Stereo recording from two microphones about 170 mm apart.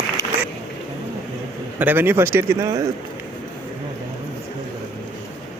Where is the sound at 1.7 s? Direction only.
10° right (ahead or behind).